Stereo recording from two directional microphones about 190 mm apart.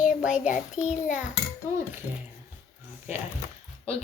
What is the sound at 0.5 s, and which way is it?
Speech, 40° left (ahead or behind).